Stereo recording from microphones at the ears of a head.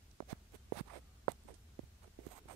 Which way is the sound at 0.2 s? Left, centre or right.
Right.